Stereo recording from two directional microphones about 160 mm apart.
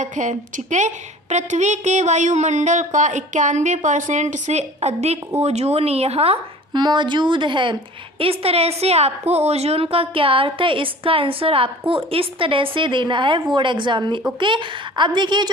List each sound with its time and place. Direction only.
0.0 s a woman's voice: 50° right (ahead or behind); by 15.4 s 30° right (ahead or behind)